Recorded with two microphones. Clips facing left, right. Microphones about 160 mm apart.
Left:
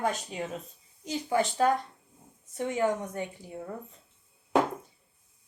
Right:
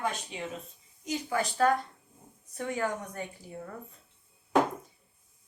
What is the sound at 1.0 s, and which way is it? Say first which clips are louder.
A woman's voice: left 3 dB; 30° left (ahead or behind).